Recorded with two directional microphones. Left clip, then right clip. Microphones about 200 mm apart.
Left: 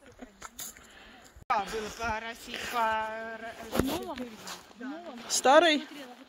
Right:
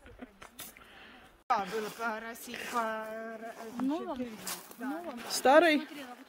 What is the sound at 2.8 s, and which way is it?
Speech, 50° right (ahead or behind).